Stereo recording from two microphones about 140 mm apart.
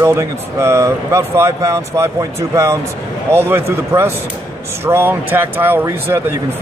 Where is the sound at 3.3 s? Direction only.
15° right (ahead or behind).